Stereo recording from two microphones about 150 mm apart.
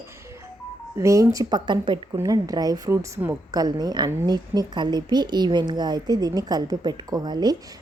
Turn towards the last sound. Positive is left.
turn(degrees=-25)  # may be behind; listen again after turning